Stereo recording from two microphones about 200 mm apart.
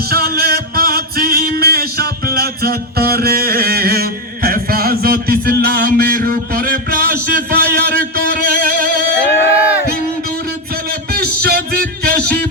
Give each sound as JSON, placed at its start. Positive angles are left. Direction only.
{"t": 0.1, "sound": "music", "side_deg": -50}
{"t": 9.2, "sound": "a sound", "side_deg": 10}
{"t": 11.1, "sound": "music", "side_deg": -50}